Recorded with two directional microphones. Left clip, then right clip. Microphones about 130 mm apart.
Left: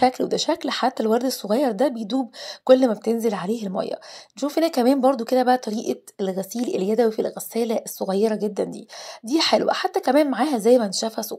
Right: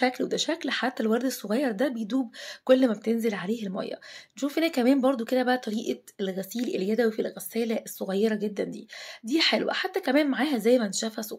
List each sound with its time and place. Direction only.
0.0 s speech: 30° left (ahead or behind)